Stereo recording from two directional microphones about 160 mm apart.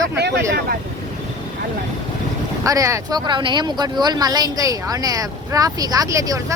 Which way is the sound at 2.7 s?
20° right (ahead or behind).